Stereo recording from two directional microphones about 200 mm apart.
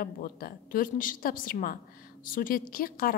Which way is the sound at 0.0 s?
45° left (ahead or behind).